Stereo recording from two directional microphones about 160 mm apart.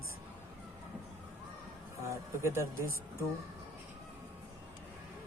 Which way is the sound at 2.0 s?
15° right (ahead or behind).